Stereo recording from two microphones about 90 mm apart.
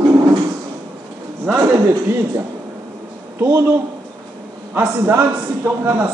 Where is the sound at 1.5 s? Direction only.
45° right (ahead or behind).